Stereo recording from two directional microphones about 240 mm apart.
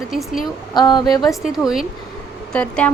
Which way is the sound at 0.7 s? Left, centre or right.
Centre.